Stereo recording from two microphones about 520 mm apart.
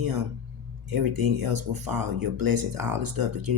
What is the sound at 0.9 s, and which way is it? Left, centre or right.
Speech, right.